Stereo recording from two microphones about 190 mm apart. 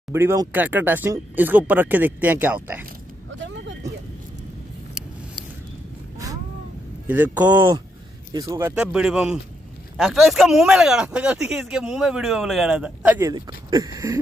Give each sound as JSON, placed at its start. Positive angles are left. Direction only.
{"t": 0.1, "sound": "speech", "side_deg": -15}
{"t": 3.3, "sound": "vehicle", "side_deg": -75}
{"t": 7.1, "sound": "speech", "side_deg": -10}
{"t": 13.3, "sound": "speech", "side_deg": -20}